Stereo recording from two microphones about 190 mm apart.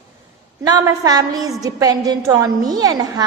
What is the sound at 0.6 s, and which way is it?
A woman's voice, 20° right (ahead or behind).